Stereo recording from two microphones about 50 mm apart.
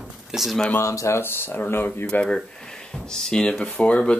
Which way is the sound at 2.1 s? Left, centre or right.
Left.